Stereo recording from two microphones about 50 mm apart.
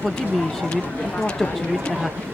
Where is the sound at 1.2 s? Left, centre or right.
Left.